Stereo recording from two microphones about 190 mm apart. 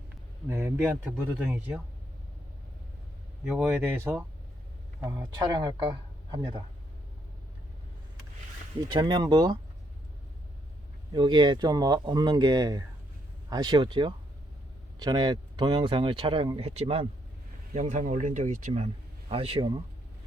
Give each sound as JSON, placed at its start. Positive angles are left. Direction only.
{"t": 0.4, "sound": "speech", "side_deg": -10}
{"t": 3.4, "sound": "speech", "side_deg": -5}
{"t": 8.9, "sound": "speech", "side_deg": -25}
{"t": 11.1, "sound": "speech", "side_deg": -25}